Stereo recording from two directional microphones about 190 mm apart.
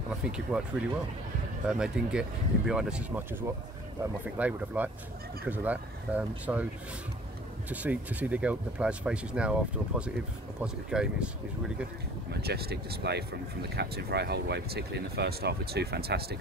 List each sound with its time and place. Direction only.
0.2 s speech: 5° right (ahead or behind)
1.7 s speech: 5° right (ahead or behind)
7.7 s speech: 10° right (ahead or behind)
12.3 s speech: 55° right (ahead or behind)